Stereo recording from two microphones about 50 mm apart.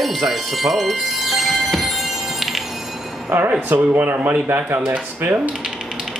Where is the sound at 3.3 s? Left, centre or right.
Right.